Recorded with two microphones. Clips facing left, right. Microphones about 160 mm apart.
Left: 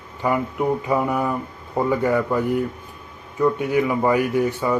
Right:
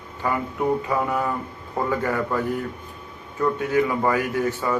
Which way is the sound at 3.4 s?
15° left (ahead or behind).